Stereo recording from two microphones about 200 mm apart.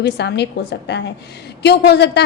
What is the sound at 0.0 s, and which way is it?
A woman's voice, 55° left (ahead or behind).